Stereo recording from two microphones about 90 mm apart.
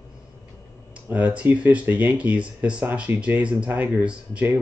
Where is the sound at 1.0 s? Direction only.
15° right (ahead or behind).